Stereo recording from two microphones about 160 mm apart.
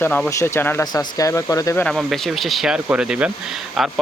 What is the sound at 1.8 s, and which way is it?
Speech, centre (ahead or behind).